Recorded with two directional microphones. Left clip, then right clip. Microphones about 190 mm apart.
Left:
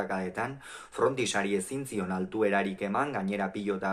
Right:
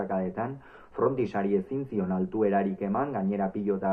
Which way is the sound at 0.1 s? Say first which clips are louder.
Right 2 dB; 20° left (ahead or behind).